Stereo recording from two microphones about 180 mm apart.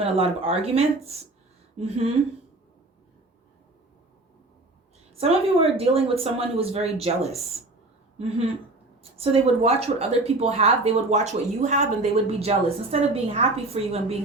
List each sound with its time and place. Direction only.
0.0 s speech: 35° right (ahead or behind)
5.1 s speech: 35° right (ahead or behind)
9.1 s speech: 35° right (ahead or behind)